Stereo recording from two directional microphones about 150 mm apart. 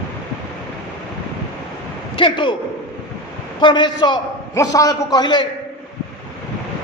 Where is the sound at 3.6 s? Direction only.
30° left (ahead or behind).